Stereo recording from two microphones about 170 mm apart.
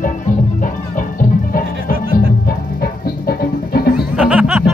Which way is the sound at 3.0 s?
60° left (ahead or behind).